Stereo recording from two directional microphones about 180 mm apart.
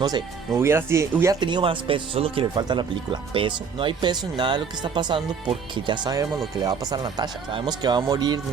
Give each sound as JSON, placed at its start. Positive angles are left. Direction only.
{"t": 0.0, "sound": "speech", "side_deg": -20}